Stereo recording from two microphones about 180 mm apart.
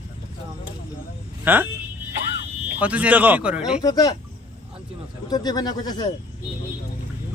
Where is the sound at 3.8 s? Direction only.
20° left (ahead or behind).